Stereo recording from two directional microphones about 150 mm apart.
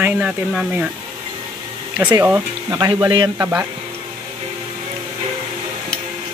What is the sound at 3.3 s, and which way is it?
Speech, 15° right (ahead or behind).